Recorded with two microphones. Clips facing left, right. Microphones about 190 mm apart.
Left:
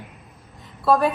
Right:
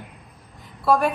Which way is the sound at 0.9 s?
Centre (ahead or behind).